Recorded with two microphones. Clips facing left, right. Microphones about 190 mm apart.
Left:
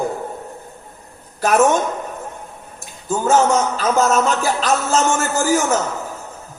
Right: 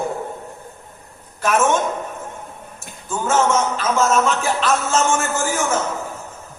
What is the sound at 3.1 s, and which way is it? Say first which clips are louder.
A man's voice: left 3 dB; 40° left (ahead or behind).